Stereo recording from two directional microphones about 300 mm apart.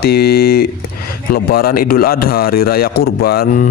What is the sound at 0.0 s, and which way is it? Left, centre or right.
Speech, left.